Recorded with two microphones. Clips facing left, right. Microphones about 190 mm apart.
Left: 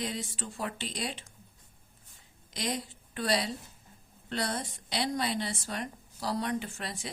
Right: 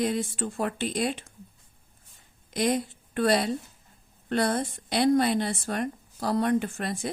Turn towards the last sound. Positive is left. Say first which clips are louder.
# right 8 dB
turn(degrees=-50)  # may be behind; listen again after turning